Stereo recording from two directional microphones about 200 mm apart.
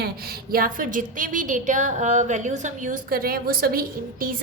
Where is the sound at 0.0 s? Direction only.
50° right (ahead or behind).